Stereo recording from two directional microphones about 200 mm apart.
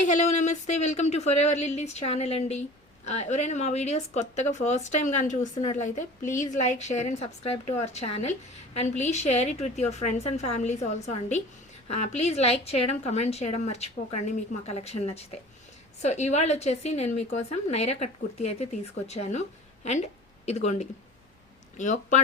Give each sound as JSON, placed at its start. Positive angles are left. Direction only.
{"t": 0.0, "sound": "a woman's voice", "side_deg": 35}